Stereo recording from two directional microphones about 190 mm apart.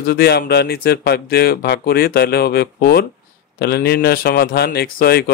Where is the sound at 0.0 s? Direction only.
55° left (ahead or behind).